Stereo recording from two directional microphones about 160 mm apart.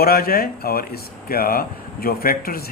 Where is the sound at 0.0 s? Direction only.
70° left (ahead or behind).